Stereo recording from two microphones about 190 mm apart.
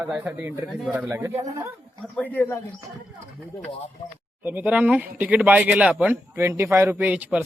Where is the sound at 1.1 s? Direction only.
15° right (ahead or behind).